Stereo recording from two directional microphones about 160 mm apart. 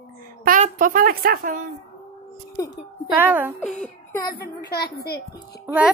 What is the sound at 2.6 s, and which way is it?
Speech, 20° left (ahead or behind).